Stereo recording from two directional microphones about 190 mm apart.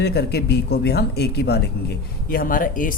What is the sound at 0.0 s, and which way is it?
Speech, 60° left (ahead or behind).